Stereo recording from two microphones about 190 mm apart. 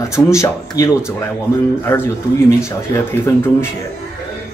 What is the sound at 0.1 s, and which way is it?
Speech, 15° left (ahead or behind).